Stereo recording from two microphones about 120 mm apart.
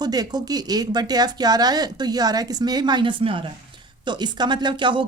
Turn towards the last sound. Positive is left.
turn(degrees=-40)  # may be behind; listen again after turning